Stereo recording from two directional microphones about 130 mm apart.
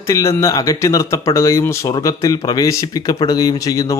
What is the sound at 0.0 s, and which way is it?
Speech, 25° left (ahead or behind).